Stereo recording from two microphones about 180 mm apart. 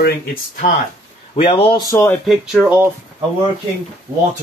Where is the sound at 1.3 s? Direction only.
30° left (ahead or behind).